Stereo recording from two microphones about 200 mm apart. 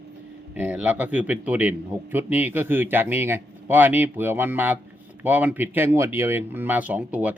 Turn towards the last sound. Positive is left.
turn(degrees=-5)  # may be behind; listen again after turning